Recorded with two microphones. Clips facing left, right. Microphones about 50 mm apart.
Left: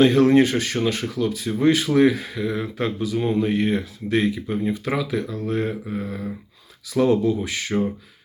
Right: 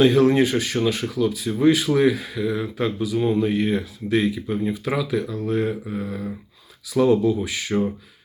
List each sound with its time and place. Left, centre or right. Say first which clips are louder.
0.0 s speech: left 1 dB; left